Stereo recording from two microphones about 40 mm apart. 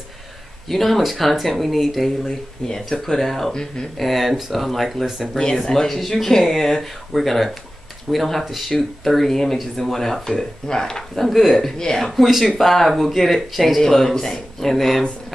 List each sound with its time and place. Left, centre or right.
0.7 s speech: centre
11.2 s speech: centre
12.1 s speech: centre